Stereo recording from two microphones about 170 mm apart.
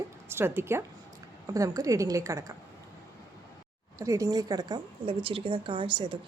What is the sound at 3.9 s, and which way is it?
A woman's voice, 20° right (ahead or behind).